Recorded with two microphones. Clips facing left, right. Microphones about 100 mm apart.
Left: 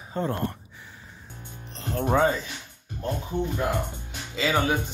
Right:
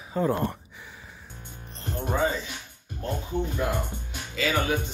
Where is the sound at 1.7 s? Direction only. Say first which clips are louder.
Left 5 dB; 90° left.